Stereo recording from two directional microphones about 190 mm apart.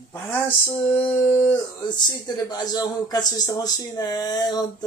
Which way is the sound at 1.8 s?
20° left (ahead or behind).